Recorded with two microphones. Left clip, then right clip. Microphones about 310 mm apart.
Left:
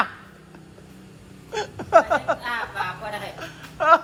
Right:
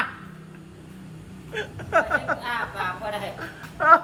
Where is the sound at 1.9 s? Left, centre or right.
Centre.